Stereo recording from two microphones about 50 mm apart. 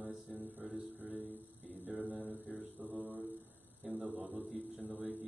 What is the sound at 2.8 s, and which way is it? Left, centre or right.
Mantra, right.